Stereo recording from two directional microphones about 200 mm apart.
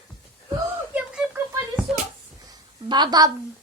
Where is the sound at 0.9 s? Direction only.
5° right (ahead or behind).